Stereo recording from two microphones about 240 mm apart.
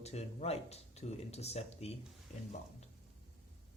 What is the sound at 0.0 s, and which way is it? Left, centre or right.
Speech, left.